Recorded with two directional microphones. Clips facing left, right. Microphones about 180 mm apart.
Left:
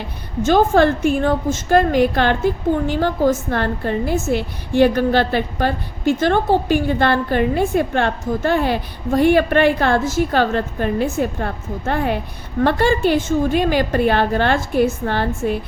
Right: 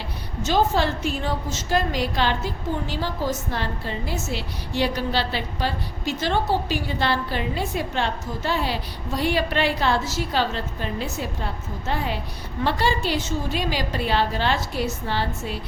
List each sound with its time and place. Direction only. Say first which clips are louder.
0.0 s a woman's voice: left 8 dB; 50° left (ahead or behind)